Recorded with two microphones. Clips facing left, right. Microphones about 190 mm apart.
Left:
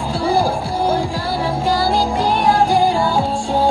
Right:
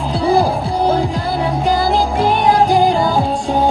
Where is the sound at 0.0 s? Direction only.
20° right (ahead or behind).